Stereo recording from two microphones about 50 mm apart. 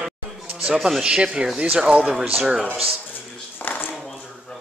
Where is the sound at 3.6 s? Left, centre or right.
Left.